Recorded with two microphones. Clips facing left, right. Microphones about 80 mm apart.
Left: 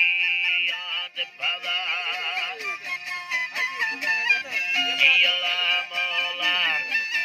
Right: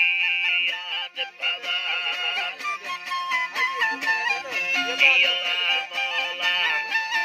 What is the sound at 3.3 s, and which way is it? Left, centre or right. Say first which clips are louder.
Music: right 2 dB; right.